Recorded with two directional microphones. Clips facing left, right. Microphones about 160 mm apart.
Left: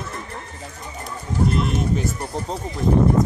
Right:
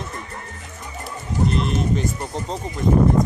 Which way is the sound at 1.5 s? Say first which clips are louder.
Even; 5° left (ahead or behind).